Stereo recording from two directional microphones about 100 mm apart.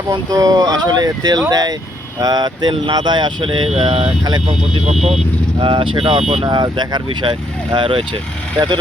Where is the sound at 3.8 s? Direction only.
75° right (ahead or behind).